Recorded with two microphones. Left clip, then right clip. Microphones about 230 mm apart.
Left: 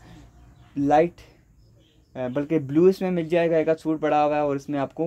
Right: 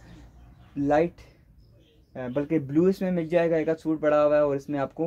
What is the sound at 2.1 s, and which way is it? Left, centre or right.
Speech, left.